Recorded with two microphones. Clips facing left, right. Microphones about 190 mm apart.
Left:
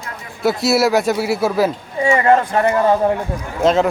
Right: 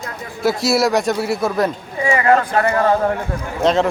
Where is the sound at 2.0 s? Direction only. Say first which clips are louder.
Left 1 dB; 25° left (ahead or behind).